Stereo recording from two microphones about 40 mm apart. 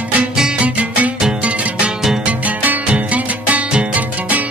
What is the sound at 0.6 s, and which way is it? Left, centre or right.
Music, right.